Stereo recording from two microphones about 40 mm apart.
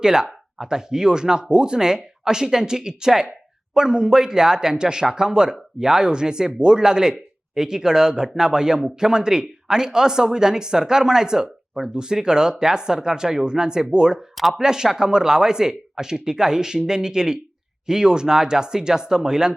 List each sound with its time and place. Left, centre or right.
0.0 s speech: centre